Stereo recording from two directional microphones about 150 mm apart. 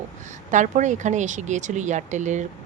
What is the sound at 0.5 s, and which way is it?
A woman's voice, 55° right (ahead or behind).